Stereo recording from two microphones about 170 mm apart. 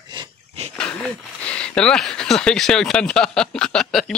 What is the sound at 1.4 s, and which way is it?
Speech, 5° left (ahead or behind).